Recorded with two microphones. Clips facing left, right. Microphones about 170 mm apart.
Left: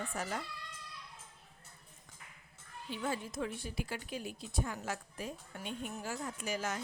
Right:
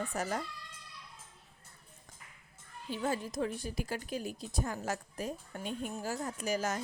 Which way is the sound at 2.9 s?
40° right (ahead or behind).